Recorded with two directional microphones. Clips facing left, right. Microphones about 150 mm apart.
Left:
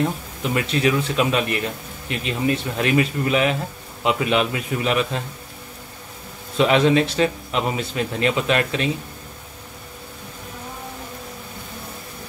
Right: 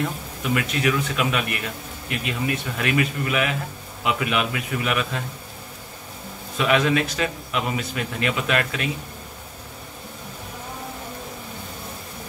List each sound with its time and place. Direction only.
0.0 s a man's voice: 30° left (ahead or behind)
6.6 s a man's voice: 30° left (ahead or behind)